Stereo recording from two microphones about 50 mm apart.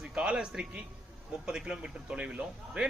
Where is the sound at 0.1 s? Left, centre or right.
Centre.